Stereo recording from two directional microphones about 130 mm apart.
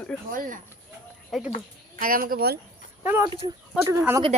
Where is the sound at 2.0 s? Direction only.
90° right.